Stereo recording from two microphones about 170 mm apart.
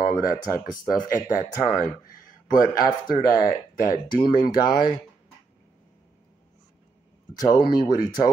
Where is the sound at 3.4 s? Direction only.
55° left (ahead or behind).